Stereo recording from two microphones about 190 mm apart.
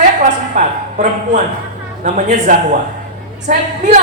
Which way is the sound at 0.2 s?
40° right (ahead or behind).